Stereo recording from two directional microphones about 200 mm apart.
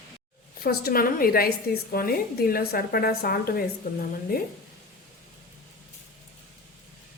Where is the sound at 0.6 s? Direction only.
50° left (ahead or behind).